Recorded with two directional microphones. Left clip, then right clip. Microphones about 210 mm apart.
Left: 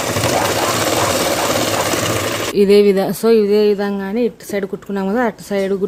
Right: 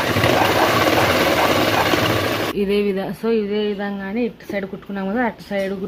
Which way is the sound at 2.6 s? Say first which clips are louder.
Left 13 dB; 50° left (ahead or behind).